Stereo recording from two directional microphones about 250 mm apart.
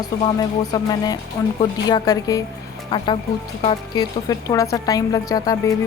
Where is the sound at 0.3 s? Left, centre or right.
Centre.